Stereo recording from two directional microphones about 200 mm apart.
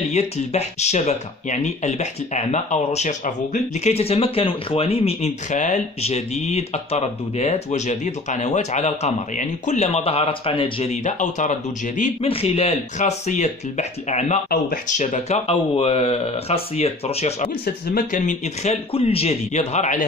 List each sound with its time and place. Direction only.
0.1 s speech: 35° left (ahead or behind)